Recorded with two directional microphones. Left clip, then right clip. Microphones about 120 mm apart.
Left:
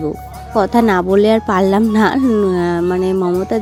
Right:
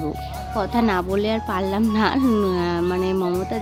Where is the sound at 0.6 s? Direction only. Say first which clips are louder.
Left 9 dB; 65° left (ahead or behind).